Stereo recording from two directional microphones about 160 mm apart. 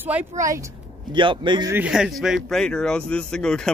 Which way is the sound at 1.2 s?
30° right (ahead or behind).